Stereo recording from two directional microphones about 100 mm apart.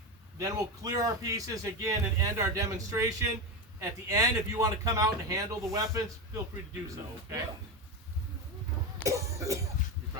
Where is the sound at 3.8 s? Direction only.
35° right (ahead or behind).